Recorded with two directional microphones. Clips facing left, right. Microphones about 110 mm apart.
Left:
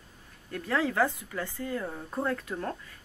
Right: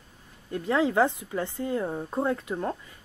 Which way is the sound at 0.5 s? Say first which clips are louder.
Right 4 dB; 20° right (ahead or behind).